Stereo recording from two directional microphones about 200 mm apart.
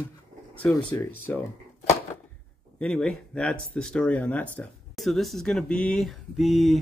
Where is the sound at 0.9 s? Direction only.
15° left (ahead or behind).